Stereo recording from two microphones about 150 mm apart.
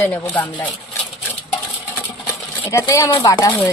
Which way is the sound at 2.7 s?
20° left (ahead or behind).